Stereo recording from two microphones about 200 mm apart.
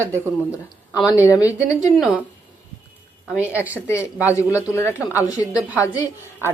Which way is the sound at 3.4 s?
10° right (ahead or behind).